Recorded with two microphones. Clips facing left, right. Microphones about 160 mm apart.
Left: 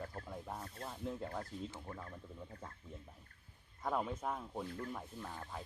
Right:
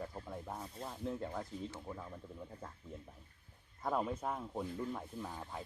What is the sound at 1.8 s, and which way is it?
Speech, 5° right (ahead or behind).